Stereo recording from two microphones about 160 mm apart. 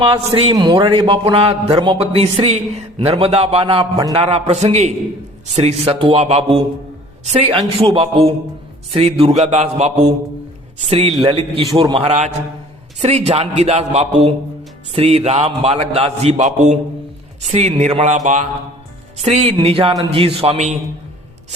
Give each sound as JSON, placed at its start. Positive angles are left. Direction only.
{"t": 0.3, "sound": "a man's voice", "side_deg": -30}